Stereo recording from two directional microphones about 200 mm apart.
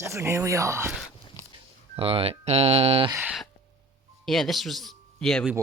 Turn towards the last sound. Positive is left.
turn(degrees=5)  # may be behind; listen again after turning